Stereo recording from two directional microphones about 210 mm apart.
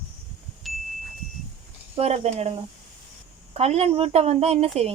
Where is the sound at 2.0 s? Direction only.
30° right (ahead or behind).